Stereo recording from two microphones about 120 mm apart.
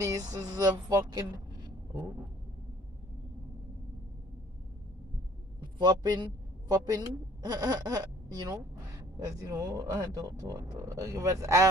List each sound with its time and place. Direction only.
0.0 s speech: 30° right (ahead or behind)
5.6 s a woman's voice: 35° right (ahead or behind)